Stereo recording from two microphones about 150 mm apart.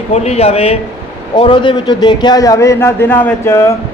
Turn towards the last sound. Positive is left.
turn(degrees=15)  # may be behind; listen again after turning